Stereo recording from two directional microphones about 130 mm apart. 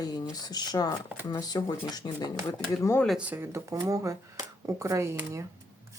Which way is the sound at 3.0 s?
10° right (ahead or behind).